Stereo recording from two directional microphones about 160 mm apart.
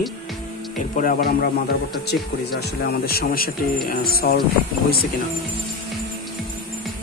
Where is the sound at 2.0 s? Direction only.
90° left; by 4.4 s 70° left (ahead or behind).